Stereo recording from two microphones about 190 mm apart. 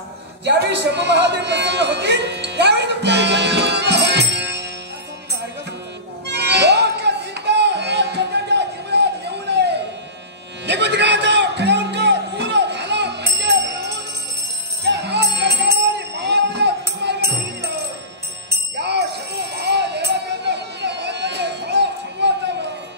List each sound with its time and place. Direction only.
0.5 s a man's voice: 65° right (ahead or behind)
6.2 s music: 65° right (ahead or behind)
18.5 s bell: 65° right (ahead or behind)